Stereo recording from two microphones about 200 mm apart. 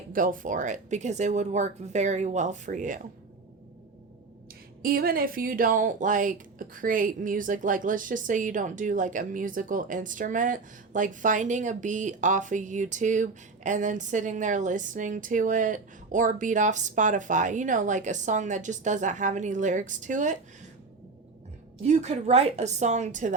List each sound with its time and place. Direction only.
0.1 s speech: 40° right (ahead or behind)
4.8 s speech: 45° right (ahead or behind)
21.8 s speech: 30° right (ahead or behind)